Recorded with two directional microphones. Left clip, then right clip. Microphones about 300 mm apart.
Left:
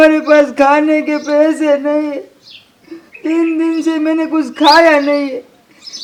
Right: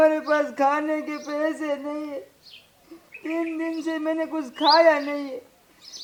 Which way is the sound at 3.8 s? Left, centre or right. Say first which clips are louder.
Left 11 dB; left.